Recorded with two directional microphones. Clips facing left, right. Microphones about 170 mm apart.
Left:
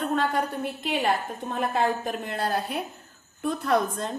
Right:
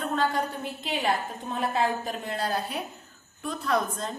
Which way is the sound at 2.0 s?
50° left (ahead or behind).